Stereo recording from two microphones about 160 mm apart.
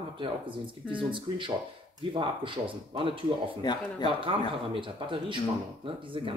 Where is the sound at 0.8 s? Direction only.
30° right (ahead or behind).